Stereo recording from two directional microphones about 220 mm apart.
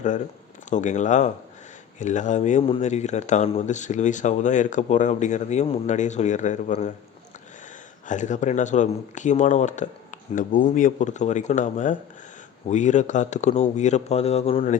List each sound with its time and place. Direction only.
0.7 s speech: 35° left (ahead or behind)
8.0 s speech: 35° left (ahead or behind)